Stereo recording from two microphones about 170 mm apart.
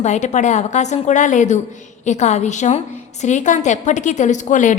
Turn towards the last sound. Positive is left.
turn(degrees=45)  # may be behind; listen again after turning